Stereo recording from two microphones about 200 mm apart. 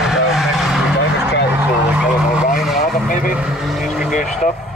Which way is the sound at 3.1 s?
40° left (ahead or behind).